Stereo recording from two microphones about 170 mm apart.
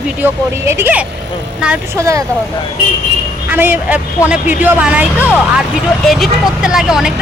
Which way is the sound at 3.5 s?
10° right (ahead or behind).